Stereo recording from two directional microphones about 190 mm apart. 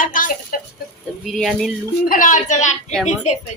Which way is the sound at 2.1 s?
45° left (ahead or behind).